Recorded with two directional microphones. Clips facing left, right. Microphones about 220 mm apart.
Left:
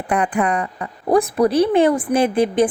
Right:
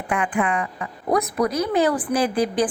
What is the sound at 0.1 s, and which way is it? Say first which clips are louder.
A woman's voice: left 4 dB; 40° left (ahead or behind).